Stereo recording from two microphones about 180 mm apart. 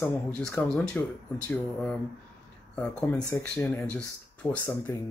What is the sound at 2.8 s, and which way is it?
Speech, 5° left (ahead or behind).